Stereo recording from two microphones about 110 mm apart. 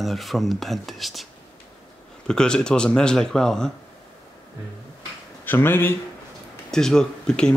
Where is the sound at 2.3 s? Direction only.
5° left (ahead or behind).